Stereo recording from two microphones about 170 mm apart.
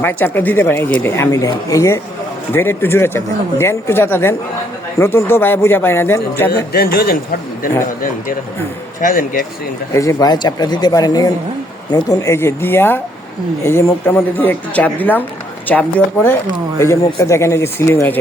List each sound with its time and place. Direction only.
0.0 s speech: 10° left (ahead or behind)
6.7 s speech: 60° left (ahead or behind)
9.0 s speech: 55° left (ahead or behind)
9.9 s speech: 20° left (ahead or behind)